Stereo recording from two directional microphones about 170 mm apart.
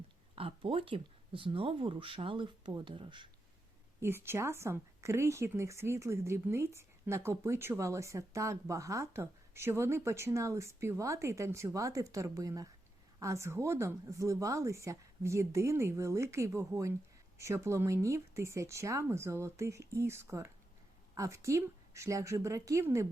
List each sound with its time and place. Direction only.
0.3 s speech: 35° right (ahead or behind)
4.0 s speech: 15° right (ahead or behind)